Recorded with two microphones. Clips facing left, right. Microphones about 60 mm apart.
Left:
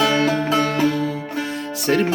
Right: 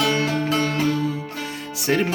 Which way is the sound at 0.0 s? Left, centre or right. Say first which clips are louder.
Left 3 dB; left.